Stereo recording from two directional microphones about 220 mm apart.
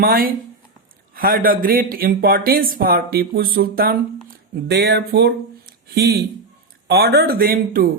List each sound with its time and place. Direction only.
0.0 s speech: 40° right (ahead or behind)